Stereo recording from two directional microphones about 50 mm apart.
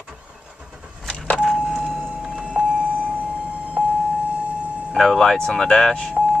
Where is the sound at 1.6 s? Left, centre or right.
Centre.